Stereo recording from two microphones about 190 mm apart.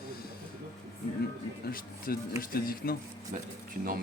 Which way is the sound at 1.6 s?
50° left (ahead or behind).